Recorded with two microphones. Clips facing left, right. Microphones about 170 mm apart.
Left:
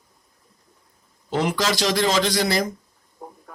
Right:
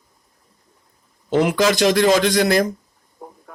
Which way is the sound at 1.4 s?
55° right (ahead or behind).